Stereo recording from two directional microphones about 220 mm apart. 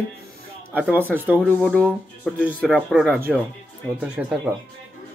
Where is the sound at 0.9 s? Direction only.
10° right (ahead or behind).